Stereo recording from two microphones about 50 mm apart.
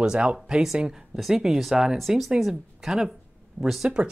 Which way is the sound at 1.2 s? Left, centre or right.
Centre.